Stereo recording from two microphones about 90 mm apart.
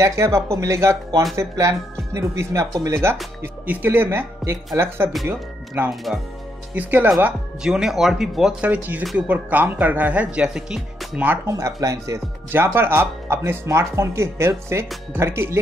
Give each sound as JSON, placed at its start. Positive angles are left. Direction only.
{"t": 0.0, "sound": "speech", "side_deg": -30}
{"t": 7.6, "sound": "speech", "side_deg": -5}
{"t": 8.6, "sound": "speech", "side_deg": -20}
{"t": 11.4, "sound": "speech", "side_deg": -35}
{"t": 12.4, "sound": "speech", "side_deg": -25}